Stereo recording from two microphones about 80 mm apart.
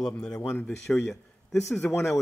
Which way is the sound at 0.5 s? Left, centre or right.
Centre.